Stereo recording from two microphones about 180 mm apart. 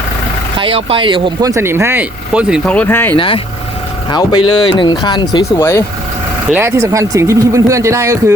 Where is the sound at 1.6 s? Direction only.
15° right (ahead or behind).